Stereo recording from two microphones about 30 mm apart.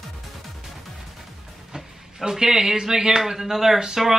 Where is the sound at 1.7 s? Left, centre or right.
Right.